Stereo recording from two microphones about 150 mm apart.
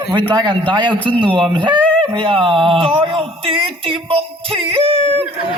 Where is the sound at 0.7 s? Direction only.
30° right (ahead or behind).